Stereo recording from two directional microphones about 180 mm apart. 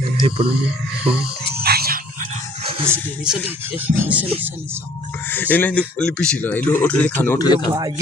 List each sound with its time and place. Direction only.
0.3 s speech: 30° right (ahead or behind)
1.6 s a sound: 60° right (ahead or behind)
2.8 s music: 10° right (ahead or behind)
5.3 s speech: 10° left (ahead or behind)
7.3 s speech: 25° left (ahead or behind)
7.7 s speech: 20° right (ahead or behind)